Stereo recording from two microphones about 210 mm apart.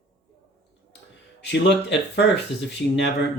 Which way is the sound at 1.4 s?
55° left (ahead or behind).